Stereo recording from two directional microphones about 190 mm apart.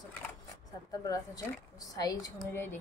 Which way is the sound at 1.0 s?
20° left (ahead or behind).